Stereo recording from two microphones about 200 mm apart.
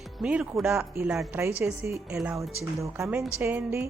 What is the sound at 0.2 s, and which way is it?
A woman's voice, 5° right (ahead or behind).